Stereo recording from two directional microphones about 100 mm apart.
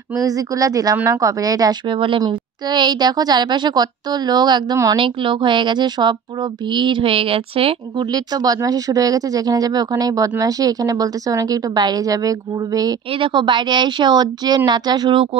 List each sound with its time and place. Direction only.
0.2 s a woman's voice: 35° right (ahead or behind)
1.9 s a woman's voice: 60° right (ahead or behind)
2.2 s a woman's voice: 45° right (ahead or behind)
4.9 s a woman's voice: 60° right (ahead or behind)
8.0 s a woman's voice: 40° right (ahead or behind)
13.2 s a woman's voice: 50° right (ahead or behind)